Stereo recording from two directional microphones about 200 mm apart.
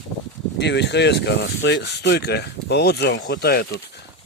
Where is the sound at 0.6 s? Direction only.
60° left (ahead or behind).